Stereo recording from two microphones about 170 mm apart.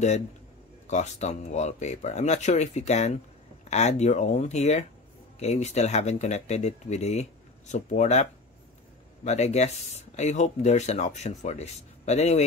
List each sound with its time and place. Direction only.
0.8 s speech: 40° left (ahead or behind)